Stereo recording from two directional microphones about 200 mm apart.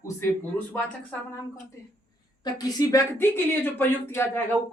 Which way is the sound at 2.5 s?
15° left (ahead or behind).